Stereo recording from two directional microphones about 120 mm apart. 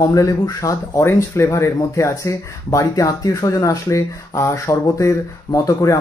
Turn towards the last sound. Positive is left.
turn(degrees=25)  # may be behind; listen again after turning